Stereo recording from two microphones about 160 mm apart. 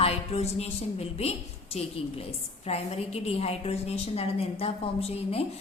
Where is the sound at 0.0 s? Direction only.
40° left (ahead or behind).